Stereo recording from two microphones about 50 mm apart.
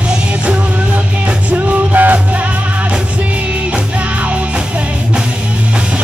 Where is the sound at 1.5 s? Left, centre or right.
Right.